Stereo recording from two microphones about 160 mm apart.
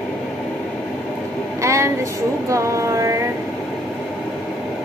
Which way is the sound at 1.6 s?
20° right (ahead or behind).